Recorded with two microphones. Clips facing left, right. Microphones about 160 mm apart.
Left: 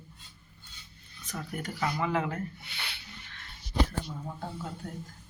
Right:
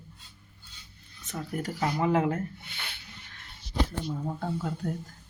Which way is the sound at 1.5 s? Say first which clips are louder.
Right 3 dB; 40° right (ahead or behind).